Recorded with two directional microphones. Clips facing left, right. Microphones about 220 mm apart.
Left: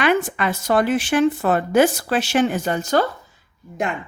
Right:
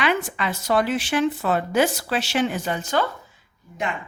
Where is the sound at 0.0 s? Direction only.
50° left (ahead or behind).